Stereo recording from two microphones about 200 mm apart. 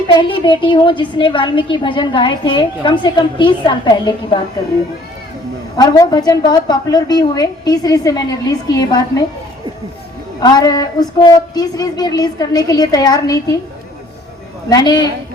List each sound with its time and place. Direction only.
0.1 s a woman's voice: 25° left (ahead or behind)
5.7 s a woman's voice: 20° left (ahead or behind)
10.4 s a woman's voice: 20° left (ahead or behind)
14.7 s a woman's voice: 20° left (ahead or behind)